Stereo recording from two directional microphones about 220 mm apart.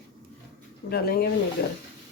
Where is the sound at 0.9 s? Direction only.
45° left (ahead or behind).